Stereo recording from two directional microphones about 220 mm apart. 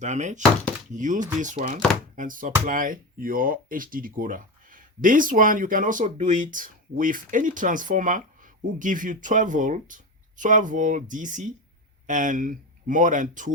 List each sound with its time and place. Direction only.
0.0 s speech: 35° right (ahead or behind)